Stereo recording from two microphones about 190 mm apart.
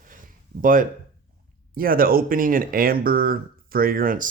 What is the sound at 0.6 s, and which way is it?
Speech, 45° right (ahead or behind).